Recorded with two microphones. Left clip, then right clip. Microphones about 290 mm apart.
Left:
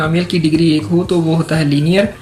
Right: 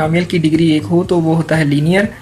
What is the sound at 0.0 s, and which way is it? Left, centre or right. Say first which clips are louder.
Speech: right 1 dB; right.